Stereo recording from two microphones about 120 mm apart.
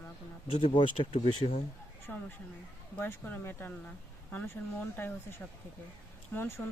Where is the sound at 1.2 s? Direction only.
60° left (ahead or behind).